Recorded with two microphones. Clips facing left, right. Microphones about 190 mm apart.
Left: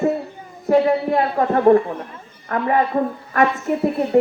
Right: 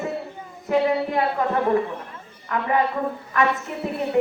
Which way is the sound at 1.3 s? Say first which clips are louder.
Left 9 dB; 45° left (ahead or behind).